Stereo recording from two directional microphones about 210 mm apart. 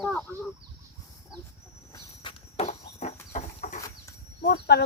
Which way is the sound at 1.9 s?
25° left (ahead or behind).